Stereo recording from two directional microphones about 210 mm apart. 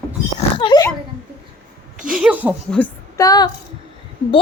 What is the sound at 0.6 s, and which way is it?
Dog, 20° left (ahead or behind).